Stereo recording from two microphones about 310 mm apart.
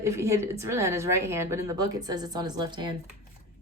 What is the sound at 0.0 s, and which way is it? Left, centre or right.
A woman's voice, centre.